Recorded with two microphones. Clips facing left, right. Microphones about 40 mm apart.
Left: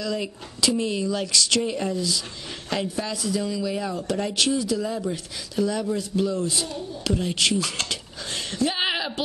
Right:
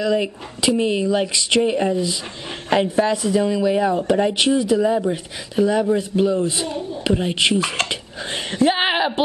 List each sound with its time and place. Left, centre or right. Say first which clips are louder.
0.0 s speech: right 8 dB; right